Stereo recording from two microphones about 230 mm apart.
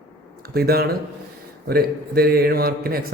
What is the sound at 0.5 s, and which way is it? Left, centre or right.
A man's voice, right.